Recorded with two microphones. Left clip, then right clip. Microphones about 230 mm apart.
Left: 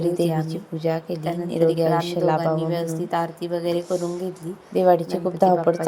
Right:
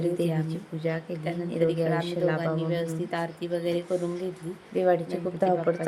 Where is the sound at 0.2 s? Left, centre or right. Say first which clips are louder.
Left 6 dB; centre.